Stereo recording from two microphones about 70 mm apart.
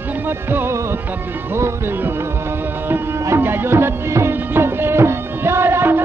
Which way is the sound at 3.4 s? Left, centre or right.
Right.